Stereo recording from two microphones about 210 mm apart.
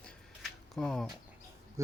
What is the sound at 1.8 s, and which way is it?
Speech, 15° right (ahead or behind).